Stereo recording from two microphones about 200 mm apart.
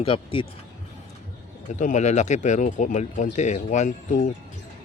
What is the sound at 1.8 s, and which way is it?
Speech, 35° left (ahead or behind).